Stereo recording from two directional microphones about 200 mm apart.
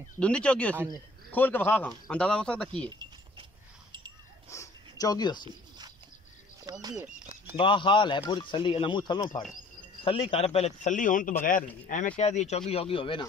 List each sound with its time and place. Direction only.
0.2 s speech: 5° left (ahead or behind)
0.7 s a man's voice: 15° right (ahead or behind)
1.3 s speech: 10° left (ahead or behind)
4.5 s a sound: 15° left (ahead or behind)
6.8 s a sound: 20° right (ahead or behind)
7.5 s a man's voice: 25° left (ahead or behind)